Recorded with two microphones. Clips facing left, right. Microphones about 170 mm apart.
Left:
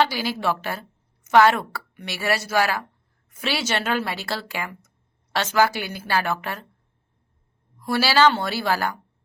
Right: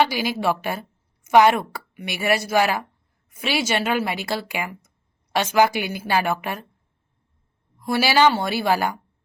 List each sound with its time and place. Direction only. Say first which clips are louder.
0.0 s a woman's voice: right 2 dB; 15° right (ahead or behind)
7.9 s a woman's voice: right 1 dB; 15° right (ahead or behind)